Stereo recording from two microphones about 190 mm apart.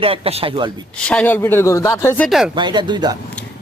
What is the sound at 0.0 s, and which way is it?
Speech, 30° right (ahead or behind).